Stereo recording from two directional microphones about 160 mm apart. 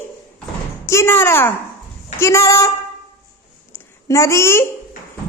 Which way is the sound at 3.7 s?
20° left (ahead or behind).